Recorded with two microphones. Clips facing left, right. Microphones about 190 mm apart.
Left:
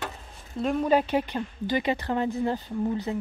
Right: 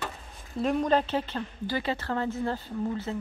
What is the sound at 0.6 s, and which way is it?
A woman's voice, centre (ahead or behind).